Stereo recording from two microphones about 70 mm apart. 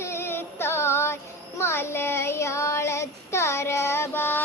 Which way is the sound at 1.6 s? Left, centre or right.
Left.